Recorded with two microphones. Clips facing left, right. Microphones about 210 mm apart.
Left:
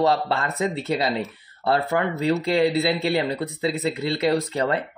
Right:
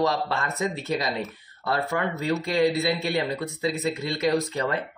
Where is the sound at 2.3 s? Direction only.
30° left (ahead or behind).